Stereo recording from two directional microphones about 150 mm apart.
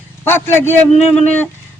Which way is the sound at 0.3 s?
15° left (ahead or behind).